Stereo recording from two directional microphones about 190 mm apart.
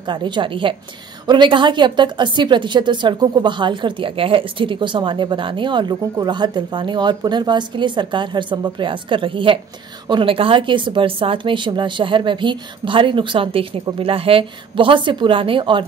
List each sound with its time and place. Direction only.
0.0 s a woman's voice: 25° right (ahead or behind)